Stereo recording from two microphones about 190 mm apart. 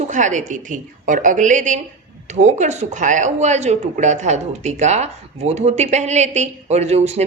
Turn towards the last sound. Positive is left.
turn(degrees=-35)  # may be behind; listen again after turning